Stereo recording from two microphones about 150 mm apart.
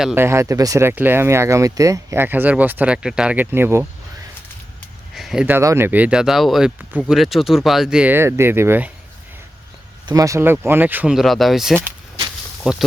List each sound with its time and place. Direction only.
0.2 s speech: 20° right (ahead or behind)
5.1 s a sound: centre (ahead or behind)
5.5 s speech: 15° right (ahead or behind)
10.1 s speech: 20° right (ahead or behind); by 12.8 s 5° right (ahead or behind)